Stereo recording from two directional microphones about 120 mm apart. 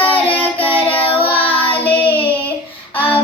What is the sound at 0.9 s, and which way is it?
Child singing, 50° left (ahead or behind).